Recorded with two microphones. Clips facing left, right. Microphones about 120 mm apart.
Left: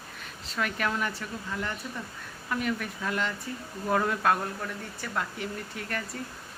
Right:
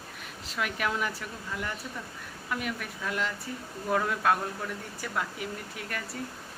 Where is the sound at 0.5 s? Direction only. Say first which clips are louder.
Left 1 dB; 10° right (ahead or behind).